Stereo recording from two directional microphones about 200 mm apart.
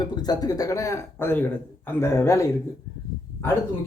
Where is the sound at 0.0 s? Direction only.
20° left (ahead or behind).